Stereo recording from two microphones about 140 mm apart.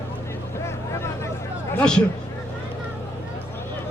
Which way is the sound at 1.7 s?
5° left (ahead or behind).